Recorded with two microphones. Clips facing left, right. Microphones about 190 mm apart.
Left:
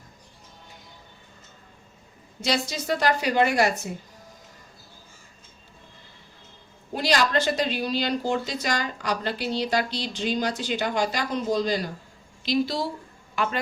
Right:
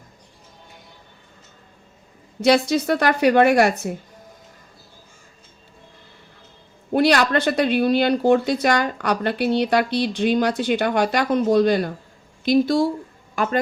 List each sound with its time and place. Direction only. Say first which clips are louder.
2.4 s speech: right 10 dB; 60° right (ahead or behind)
6.9 s speech: right 6 dB; 60° right (ahead or behind)